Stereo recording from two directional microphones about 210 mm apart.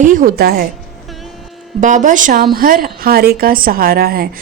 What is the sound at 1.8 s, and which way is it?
A woman's voice, 35° right (ahead or behind).